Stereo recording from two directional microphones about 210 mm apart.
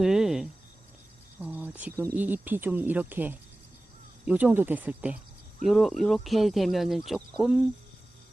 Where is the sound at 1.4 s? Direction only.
5° right (ahead or behind).